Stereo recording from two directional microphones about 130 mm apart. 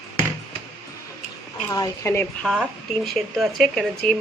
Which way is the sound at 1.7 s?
25° left (ahead or behind).